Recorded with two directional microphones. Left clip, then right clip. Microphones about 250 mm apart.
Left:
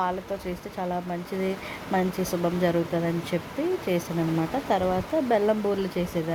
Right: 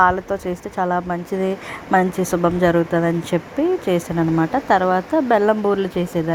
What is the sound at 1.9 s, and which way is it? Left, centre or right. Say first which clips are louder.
Speech: right 9 dB; centre.